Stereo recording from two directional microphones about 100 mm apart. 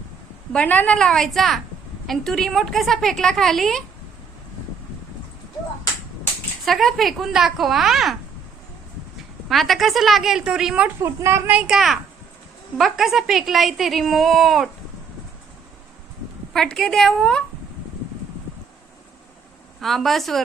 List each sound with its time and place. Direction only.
0.5 s a woman's voice: 15° left (ahead or behind)
6.7 s a woman's voice: centre (ahead or behind)
9.5 s a woman's voice: centre (ahead or behind)
10.8 s a woman's voice: 25° right (ahead or behind)
11.5 s a woman's voice: 5° right (ahead or behind)
16.5 s a woman's voice: 5° left (ahead or behind)
19.8 s a woman's voice: centre (ahead or behind)